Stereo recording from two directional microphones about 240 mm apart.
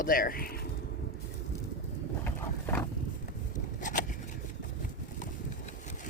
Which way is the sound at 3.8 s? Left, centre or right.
Left.